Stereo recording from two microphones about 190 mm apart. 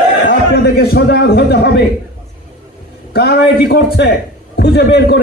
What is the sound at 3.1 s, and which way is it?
A man's voice, 60° left (ahead or behind).